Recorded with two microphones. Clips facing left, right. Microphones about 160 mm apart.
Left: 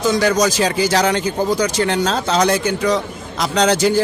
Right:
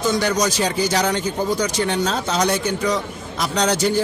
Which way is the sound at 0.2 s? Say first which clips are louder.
Left 4 dB; 90° left.